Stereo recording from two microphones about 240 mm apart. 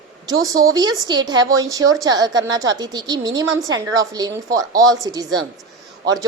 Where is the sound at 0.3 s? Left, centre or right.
Centre.